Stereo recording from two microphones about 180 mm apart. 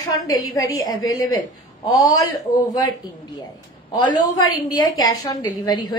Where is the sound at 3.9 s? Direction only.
20° left (ahead or behind).